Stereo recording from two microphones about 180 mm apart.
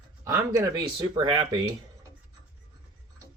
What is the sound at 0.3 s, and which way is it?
Speech, 20° right (ahead or behind).